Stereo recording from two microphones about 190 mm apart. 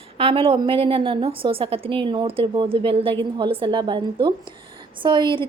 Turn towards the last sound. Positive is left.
turn(degrees=-25)  # may be behind; listen again after turning